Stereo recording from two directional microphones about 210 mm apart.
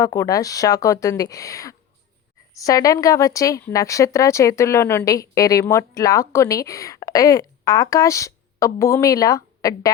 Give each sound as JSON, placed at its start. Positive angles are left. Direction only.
{"t": 0.0, "sound": "speech", "side_deg": 15}